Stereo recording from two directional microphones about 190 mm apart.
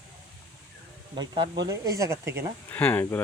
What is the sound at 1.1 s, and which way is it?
Speech, 20° right (ahead or behind).